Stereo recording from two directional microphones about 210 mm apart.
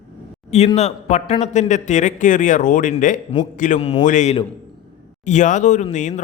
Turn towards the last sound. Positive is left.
turn(degrees=35)  # may be behind; listen again after turning